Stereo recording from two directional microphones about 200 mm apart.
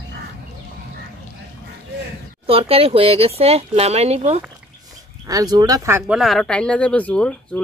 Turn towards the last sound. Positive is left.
turn(degrees=5)  # may be behind; listen again after turning